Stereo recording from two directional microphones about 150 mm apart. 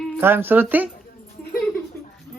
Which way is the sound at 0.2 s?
15° right (ahead or behind).